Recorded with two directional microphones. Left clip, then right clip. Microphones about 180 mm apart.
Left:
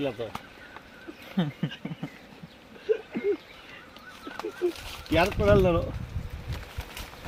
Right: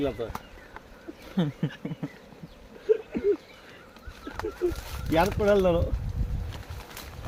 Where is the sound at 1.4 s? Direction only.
60° right (ahead or behind).